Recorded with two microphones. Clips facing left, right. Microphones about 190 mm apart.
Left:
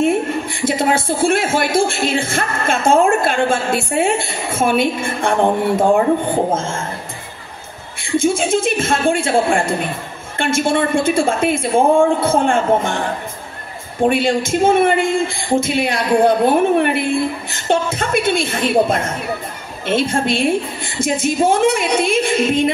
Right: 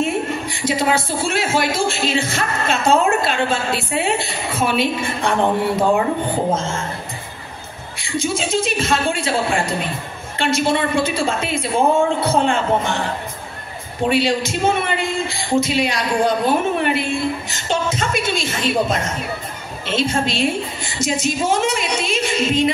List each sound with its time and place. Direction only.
0.0 s a woman's voice: 55° left (ahead or behind)
6.5 s a woman's voice: 50° left (ahead or behind)
8.0 s a woman's voice: 50° left (ahead or behind)
14.0 s a man's voice: 50° left (ahead or behind)